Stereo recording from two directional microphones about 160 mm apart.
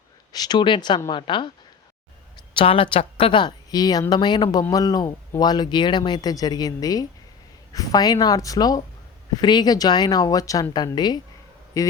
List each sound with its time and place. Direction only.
0.3 s speech: 25° left (ahead or behind)
2.6 s a woman's voice: 35° left (ahead or behind)